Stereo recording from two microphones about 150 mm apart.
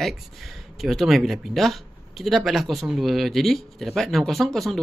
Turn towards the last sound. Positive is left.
turn(degrees=0)  # may be behind; listen again after turning